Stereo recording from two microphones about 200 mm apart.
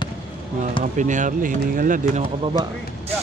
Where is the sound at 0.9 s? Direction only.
40° right (ahead or behind).